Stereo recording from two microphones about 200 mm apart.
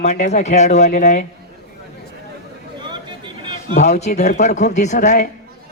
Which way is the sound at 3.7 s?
35° left (ahead or behind).